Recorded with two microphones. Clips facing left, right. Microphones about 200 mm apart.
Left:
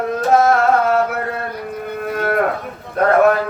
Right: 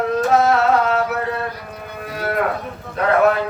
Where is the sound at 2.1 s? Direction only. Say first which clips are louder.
Left 3 dB; 50° left (ahead or behind).